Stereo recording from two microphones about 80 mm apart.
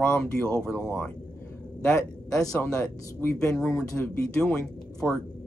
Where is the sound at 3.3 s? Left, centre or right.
Centre.